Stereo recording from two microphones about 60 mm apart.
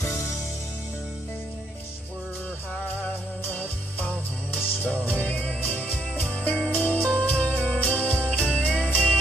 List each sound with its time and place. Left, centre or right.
4.5 s music: left